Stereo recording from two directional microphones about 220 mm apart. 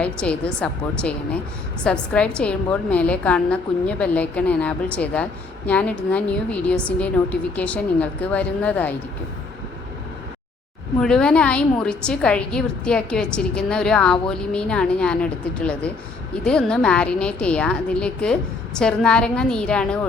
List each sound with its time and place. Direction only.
0.0 s a woman's voice: 5° left (ahead or behind)
11.0 s a woman's voice: 5° left (ahead or behind)